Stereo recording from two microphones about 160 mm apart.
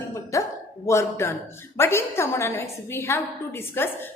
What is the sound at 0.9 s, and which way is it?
A woman's voice, 15° left (ahead or behind).